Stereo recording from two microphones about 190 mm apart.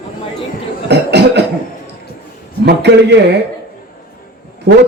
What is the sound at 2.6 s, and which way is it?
Speech, 60° right (ahead or behind).